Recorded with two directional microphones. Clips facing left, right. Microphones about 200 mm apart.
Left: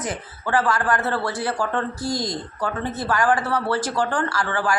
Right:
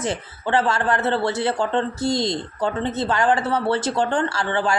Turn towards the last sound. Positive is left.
turn(degrees=-25)  # may be behind; listen again after turning